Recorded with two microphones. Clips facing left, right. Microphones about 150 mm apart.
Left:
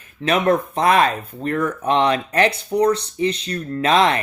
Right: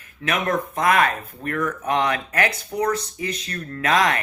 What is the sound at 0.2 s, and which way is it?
Speech, 30° left (ahead or behind).